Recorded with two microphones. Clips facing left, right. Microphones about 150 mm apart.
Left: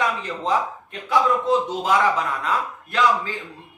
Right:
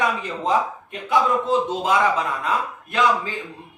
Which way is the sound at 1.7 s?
20° right (ahead or behind).